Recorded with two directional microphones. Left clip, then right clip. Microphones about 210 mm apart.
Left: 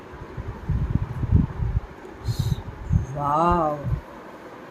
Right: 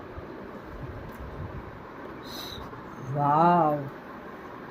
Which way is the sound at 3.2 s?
Centre (ahead or behind).